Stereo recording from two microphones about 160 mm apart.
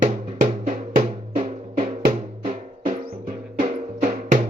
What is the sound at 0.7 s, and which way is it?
Drum, 50° right (ahead or behind).